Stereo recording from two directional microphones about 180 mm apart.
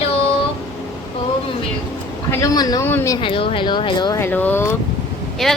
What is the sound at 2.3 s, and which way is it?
Speech, 20° left (ahead or behind).